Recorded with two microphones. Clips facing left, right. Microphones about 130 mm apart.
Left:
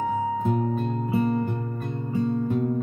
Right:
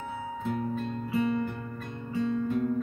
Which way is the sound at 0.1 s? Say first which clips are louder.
Left 8 dB; 40° left (ahead or behind).